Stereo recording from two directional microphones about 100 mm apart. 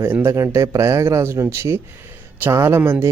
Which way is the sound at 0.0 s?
25° right (ahead or behind).